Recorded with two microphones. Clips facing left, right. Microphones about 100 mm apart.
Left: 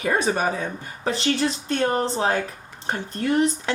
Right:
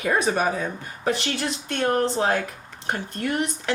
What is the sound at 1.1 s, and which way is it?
Speech, 30° left (ahead or behind).